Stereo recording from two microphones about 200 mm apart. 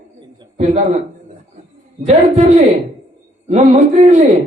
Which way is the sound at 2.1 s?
35° right (ahead or behind).